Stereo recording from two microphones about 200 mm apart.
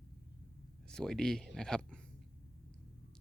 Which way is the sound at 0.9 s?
5° left (ahead or behind).